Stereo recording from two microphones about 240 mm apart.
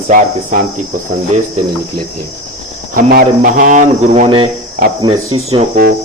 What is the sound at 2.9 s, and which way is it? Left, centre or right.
Speech, right.